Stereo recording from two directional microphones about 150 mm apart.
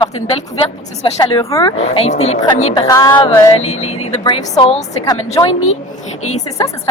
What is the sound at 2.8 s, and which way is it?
Speech, 25° left (ahead or behind).